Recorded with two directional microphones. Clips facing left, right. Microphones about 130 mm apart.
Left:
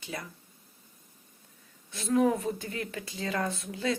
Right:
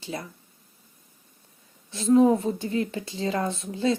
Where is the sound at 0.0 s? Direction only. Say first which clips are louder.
Right 5 dB; 30° right (ahead or behind).